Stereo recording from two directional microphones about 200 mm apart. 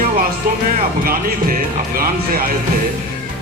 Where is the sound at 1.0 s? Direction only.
45° right (ahead or behind).